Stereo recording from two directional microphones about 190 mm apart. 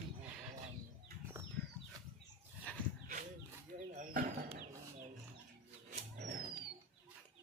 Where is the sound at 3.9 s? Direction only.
45° right (ahead or behind).